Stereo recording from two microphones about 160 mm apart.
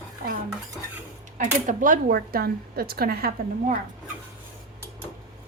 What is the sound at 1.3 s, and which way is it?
Speech, 55° right (ahead or behind).